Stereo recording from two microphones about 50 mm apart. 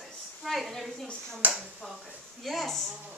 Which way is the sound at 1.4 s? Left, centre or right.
Right.